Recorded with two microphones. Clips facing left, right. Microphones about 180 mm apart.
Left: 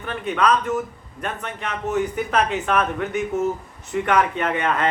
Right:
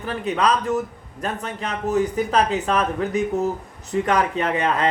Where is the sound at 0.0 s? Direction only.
35° right (ahead or behind).